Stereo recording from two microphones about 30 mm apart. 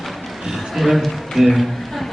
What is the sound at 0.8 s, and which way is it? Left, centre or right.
Speech, centre.